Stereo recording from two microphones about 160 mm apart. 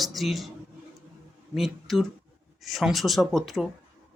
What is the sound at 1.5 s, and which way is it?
Speech, centre (ahead or behind).